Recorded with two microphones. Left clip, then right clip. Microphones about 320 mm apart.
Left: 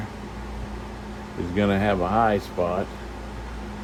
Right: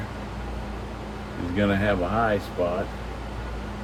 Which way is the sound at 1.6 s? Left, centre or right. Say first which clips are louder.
Left 1 dB; left.